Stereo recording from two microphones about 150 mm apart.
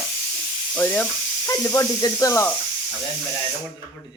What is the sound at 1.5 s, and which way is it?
Speech, 20° left (ahead or behind).